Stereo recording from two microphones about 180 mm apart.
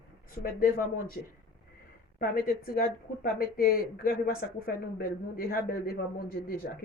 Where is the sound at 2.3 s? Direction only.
55° left (ahead or behind).